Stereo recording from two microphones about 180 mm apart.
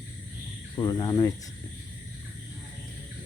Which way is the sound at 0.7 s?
20° left (ahead or behind).